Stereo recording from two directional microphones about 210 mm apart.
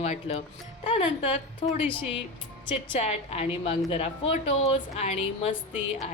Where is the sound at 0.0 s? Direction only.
30° left (ahead or behind).